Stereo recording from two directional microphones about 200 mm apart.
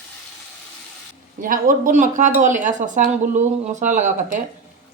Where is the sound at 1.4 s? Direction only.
45° right (ahead or behind).